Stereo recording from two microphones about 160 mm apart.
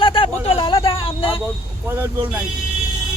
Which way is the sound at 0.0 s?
35° left (ahead or behind).